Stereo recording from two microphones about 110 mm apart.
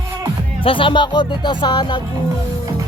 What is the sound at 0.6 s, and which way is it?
Music, 50° left (ahead or behind).